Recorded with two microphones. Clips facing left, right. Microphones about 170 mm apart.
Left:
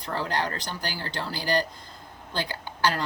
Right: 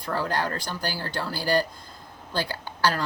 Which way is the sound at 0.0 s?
45° right (ahead or behind).